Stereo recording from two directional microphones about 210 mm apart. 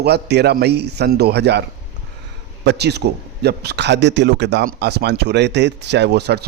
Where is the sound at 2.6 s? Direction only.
50° right (ahead or behind).